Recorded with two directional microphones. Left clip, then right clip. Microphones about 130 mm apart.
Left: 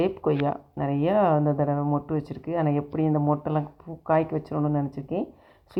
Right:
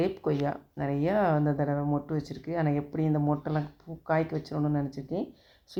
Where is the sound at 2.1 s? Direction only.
25° left (ahead or behind).